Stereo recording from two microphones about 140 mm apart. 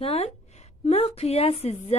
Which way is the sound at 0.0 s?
45° left (ahead or behind).